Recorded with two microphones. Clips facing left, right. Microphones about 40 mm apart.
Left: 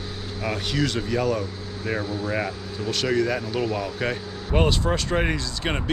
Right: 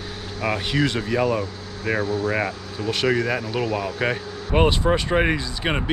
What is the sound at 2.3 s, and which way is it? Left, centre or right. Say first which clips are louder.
Speech: right 2 dB; right.